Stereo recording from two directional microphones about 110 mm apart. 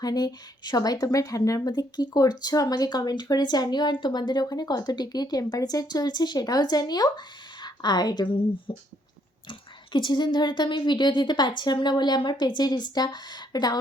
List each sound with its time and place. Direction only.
0.0 s a woman's voice: 35° left (ahead or behind)